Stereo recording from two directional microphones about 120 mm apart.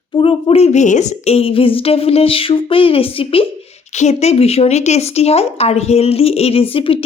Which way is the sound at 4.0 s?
65° left (ahead or behind).